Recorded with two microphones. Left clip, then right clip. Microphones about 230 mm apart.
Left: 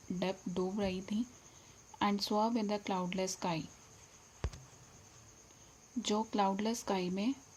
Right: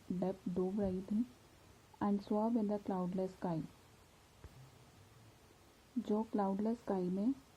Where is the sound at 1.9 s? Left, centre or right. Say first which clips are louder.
Left 5 dB; centre.